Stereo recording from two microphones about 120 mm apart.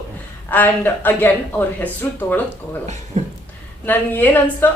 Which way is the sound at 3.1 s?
90° right.